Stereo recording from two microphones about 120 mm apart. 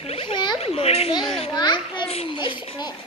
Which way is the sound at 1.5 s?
40° left (ahead or behind).